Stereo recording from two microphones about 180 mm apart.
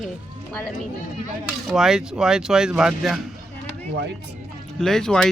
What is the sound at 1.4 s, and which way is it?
Speech, centre (ahead or behind).